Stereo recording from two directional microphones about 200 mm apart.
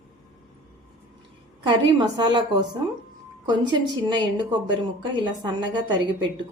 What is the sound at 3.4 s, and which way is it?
A woman's voice, 25° right (ahead or behind).